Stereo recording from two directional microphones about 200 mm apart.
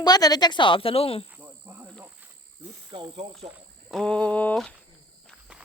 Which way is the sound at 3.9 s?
5° left (ahead or behind).